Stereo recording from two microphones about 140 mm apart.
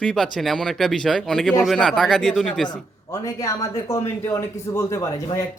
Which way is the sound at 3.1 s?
25° left (ahead or behind).